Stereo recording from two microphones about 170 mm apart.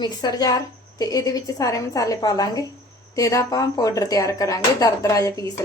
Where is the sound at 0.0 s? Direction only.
25° left (ahead or behind).